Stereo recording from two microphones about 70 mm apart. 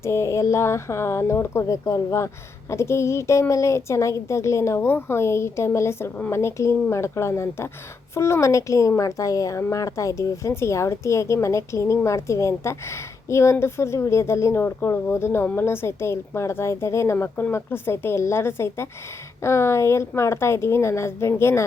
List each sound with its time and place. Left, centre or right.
0.0 s speech: left
14.6 s speech: left